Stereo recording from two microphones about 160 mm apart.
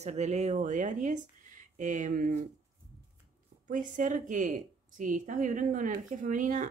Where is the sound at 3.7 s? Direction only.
55° right (ahead or behind).